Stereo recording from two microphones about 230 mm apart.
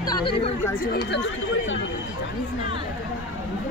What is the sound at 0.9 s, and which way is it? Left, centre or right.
Speech, left.